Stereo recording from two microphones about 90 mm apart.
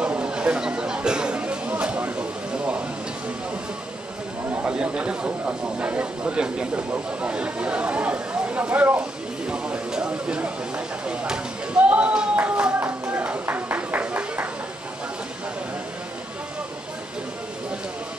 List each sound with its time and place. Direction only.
0.0 s chatter: 10° right (ahead or behind)
4.5 s chatter: 15° right (ahead or behind)
5.8 s speech: 15° right (ahead or behind)
9.5 s a sound: 10° right (ahead or behind)